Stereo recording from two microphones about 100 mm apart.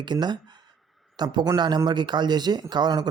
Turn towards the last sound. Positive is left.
turn(degrees=-45)  # may be behind; listen again after turning